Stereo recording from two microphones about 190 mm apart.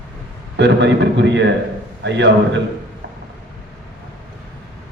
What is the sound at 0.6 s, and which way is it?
A man's voice, 70° right (ahead or behind).